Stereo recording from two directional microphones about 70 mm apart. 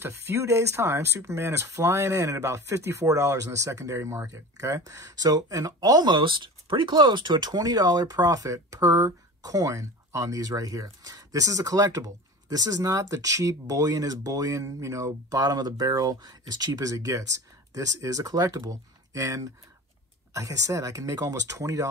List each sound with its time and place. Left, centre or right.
0.0 s speech: right
16.9 s speech: right